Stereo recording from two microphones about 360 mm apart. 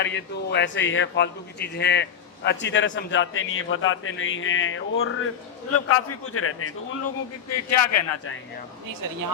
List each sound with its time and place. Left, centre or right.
0.0 s a man's voice: left
7.5 s a man's voice: left